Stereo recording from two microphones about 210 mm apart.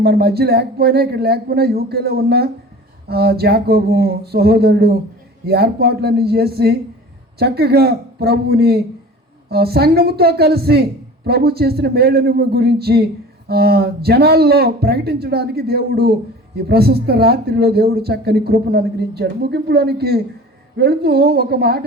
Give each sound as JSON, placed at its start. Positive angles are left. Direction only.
{"t": 0.0, "sound": "speech", "side_deg": -50}